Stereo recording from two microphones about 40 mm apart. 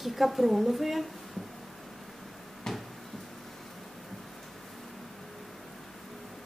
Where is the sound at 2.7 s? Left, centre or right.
Centre.